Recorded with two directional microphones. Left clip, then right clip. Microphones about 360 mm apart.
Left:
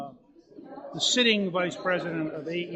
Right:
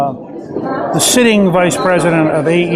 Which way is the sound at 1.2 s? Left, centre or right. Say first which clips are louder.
Right 14 dB; centre.